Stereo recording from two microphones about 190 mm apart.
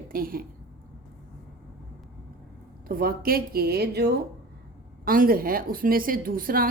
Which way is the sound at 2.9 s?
50° right (ahead or behind).